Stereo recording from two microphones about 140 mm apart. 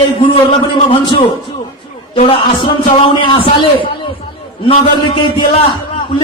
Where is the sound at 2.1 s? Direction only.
40° left (ahead or behind).